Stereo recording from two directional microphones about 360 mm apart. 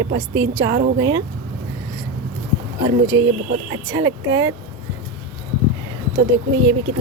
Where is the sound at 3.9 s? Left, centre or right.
Centre.